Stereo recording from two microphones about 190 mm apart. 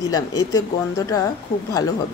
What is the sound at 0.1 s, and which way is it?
Speech, 20° left (ahead or behind).